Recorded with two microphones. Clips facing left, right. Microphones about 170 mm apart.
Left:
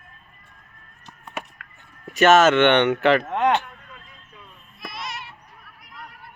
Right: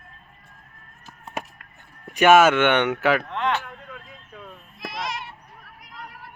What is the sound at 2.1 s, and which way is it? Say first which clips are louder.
Speech: even; 10° right (ahead or behind).